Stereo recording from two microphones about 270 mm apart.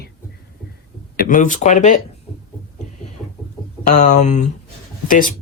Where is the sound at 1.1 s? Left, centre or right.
Left.